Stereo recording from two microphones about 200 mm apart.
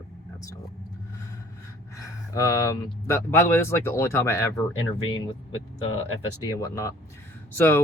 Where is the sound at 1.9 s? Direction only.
15° left (ahead or behind).